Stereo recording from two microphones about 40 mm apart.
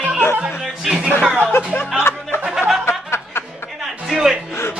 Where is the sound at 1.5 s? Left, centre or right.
Left.